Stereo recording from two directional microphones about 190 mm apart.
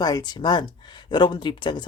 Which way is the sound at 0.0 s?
20° left (ahead or behind).